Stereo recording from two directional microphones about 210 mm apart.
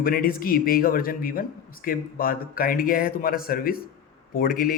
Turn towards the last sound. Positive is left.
turn(degrees=40)  # may be behind; listen again after turning